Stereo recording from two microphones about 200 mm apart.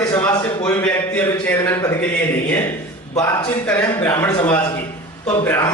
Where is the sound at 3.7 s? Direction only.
10° left (ahead or behind).